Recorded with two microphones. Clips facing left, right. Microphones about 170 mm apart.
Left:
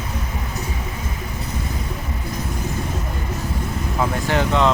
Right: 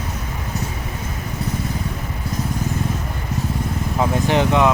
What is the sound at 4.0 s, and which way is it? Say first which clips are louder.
Speech: right 3 dB; 20° right (ahead or behind).